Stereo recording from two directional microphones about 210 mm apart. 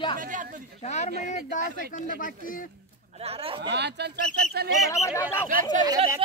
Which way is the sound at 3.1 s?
30° right (ahead or behind).